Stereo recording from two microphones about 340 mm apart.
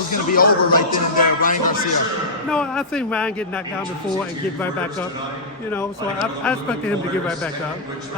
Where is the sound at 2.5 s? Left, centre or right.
Centre.